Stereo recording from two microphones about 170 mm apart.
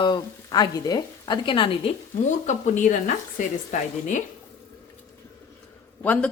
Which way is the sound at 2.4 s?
45° left (ahead or behind).